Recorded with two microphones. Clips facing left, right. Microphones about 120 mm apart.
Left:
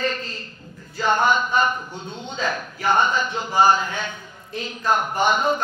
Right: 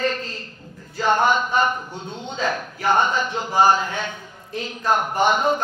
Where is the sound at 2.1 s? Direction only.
55° right (ahead or behind).